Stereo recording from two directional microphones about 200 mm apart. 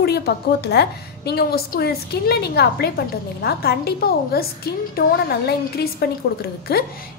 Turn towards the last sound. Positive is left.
turn(degrees=50)  # may be behind; listen again after turning